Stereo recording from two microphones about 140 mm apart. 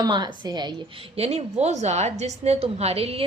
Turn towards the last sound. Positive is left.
turn(degrees=-45)  # may be behind; listen again after turning